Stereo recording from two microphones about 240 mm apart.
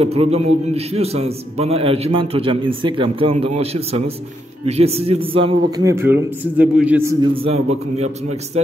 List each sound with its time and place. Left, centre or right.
0.0 s a man's voice: right